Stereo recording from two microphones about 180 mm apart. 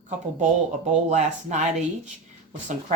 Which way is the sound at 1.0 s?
40° right (ahead or behind).